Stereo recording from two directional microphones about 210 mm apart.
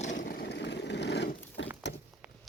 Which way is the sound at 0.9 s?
55° left (ahead or behind).